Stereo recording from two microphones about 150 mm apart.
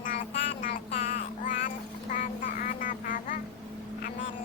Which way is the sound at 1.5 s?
60° left (ahead or behind).